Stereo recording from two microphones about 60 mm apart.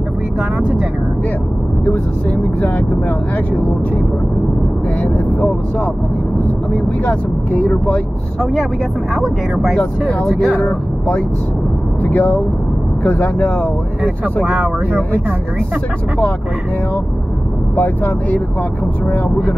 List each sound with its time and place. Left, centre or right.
5.0 s speech: left
7.1 s speech: left
9.1 s speech: centre
10.6 s speech: left
14.5 s speech: right
17.7 s speech: left